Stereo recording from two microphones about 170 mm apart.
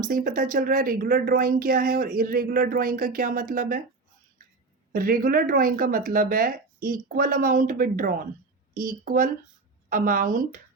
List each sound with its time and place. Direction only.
0.0 s a woman's voice: 55° right (ahead or behind)
4.9 s a woman's voice: 55° right (ahead or behind)